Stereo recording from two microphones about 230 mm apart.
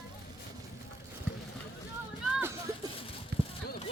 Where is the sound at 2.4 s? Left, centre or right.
Centre.